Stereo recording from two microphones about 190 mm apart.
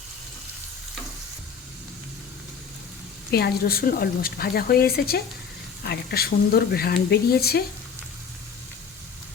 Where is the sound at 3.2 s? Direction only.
55° left (ahead or behind).